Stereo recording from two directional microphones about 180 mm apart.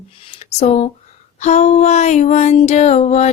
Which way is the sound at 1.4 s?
40° left (ahead or behind).